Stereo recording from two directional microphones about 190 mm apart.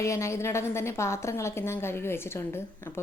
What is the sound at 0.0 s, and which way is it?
A woman's voice, 15° left (ahead or behind).